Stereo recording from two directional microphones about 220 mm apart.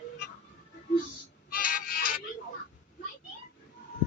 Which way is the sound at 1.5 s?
40° left (ahead or behind).